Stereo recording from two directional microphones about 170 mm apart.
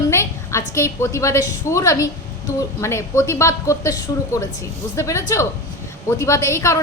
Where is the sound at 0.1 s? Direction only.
15° left (ahead or behind).